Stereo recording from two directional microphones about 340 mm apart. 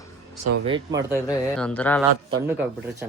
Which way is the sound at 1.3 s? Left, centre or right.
Centre.